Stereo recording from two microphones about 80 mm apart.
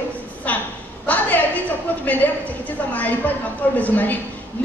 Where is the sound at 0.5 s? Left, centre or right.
Left.